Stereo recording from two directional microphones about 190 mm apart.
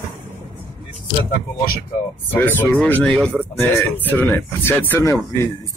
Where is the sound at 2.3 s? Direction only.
10° left (ahead or behind).